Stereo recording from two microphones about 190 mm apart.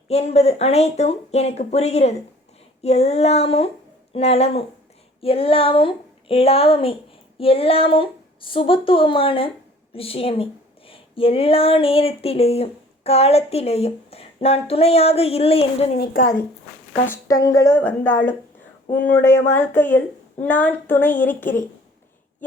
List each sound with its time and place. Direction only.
0.1 s a woman's voice: 35° left (ahead or behind)
16.9 s speech: 15° left (ahead or behind)